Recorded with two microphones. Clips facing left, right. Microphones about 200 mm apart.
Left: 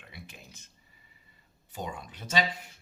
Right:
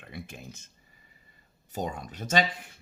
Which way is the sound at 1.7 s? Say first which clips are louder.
Right 5 dB; 40° right (ahead or behind).